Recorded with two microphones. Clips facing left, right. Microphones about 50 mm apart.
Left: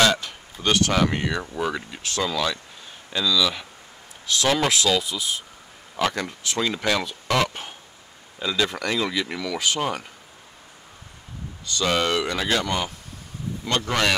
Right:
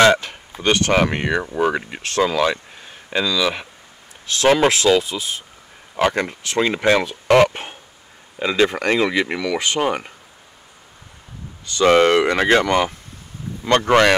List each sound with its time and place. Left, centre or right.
0.0 s speech: right
11.6 s speech: right